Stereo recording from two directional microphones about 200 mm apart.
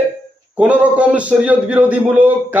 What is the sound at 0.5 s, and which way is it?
A man's voice, 5° right (ahead or behind).